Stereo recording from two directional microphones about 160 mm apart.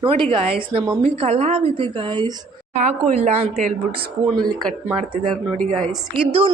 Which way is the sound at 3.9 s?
35° right (ahead or behind).